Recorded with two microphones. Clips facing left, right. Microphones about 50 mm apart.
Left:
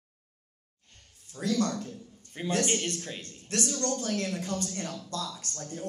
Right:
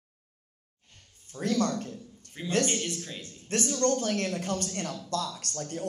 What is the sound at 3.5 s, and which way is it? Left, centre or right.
A man's voice, right.